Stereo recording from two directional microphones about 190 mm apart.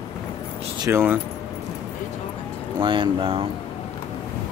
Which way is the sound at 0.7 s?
15° right (ahead or behind).